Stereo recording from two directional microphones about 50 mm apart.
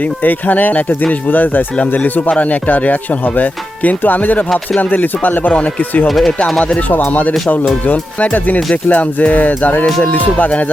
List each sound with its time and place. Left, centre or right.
0.2 s music: left
6.1 s speech: centre
6.9 s music: left